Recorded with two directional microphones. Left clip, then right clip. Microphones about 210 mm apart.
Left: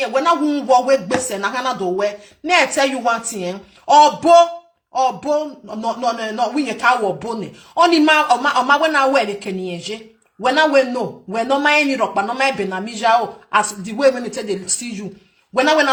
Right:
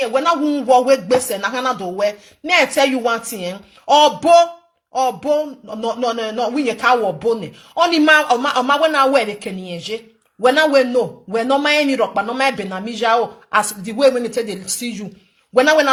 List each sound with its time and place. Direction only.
0.0 s speech: 30° right (ahead or behind)